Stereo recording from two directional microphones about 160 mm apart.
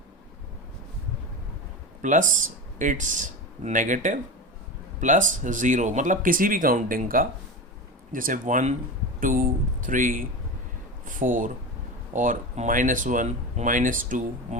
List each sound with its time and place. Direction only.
2.0 s speech: 55° right (ahead or behind)